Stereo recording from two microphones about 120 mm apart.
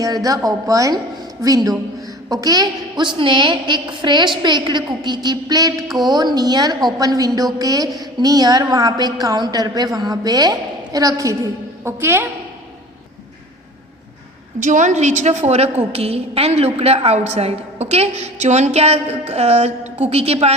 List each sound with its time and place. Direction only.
0.0 s a woman's voice: 30° right (ahead or behind)
14.6 s a woman's voice: 90° right; by 20.5 s 55° right (ahead or behind)